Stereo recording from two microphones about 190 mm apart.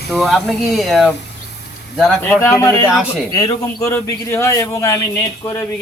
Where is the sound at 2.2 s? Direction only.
15° left (ahead or behind).